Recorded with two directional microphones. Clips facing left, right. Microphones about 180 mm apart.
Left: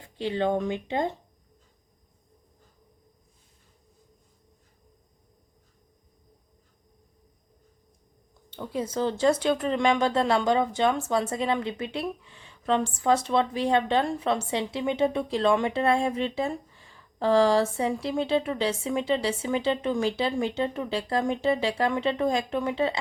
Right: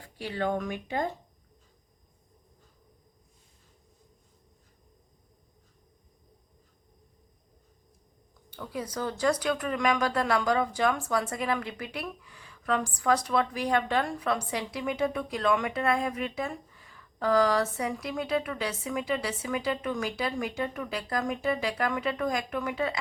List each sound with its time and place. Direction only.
0.0 s speech: 25° left (ahead or behind)
8.4 s speech: 25° left (ahead or behind)